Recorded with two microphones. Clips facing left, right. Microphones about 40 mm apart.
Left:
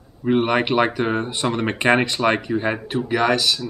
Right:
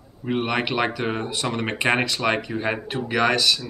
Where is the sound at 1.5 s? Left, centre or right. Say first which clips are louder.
Left 4 dB; centre.